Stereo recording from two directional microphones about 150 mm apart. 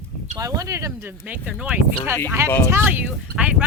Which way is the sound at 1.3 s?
5° right (ahead or behind).